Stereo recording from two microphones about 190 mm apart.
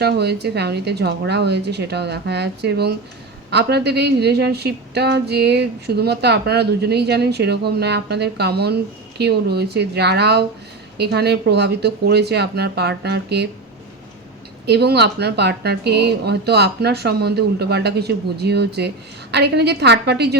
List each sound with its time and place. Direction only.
0.0 s a woman's voice: 60° right (ahead or behind)
14.7 s a woman's voice: 60° right (ahead or behind)